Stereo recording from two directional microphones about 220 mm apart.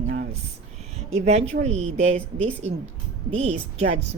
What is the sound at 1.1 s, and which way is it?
A woman's voice, 30° right (ahead or behind).